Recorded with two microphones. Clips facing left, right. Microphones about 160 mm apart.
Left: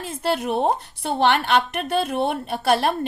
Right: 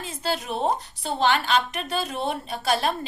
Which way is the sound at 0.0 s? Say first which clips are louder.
Left 5 dB; 60° left (ahead or behind).